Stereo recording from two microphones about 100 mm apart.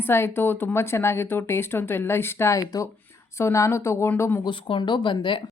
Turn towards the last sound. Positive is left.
turn(degrees=55)  # may be behind; listen again after turning